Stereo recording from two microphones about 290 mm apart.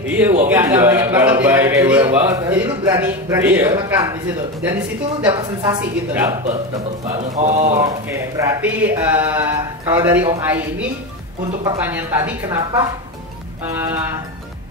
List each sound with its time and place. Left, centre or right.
0.1 s a man's voice: centre
5.2 s a man's voice: centre
7.2 s speech: right
7.7 s a man's voice: centre